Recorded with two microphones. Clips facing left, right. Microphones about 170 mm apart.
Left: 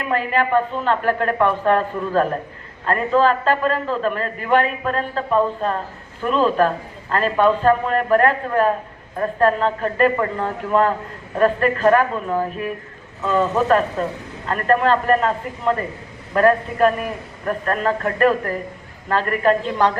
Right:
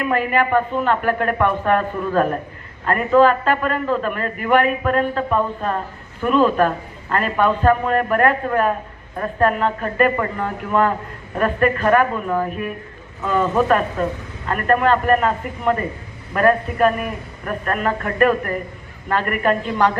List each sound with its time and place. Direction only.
0.0 s a man's voice: 30° left (ahead or behind)
6.2 s a man's voice: 30° left (ahead or behind)